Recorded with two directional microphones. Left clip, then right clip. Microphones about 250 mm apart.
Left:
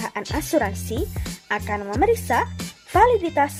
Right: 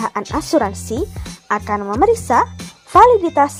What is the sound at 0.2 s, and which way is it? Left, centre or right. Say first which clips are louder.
Speech: right 4 dB; centre.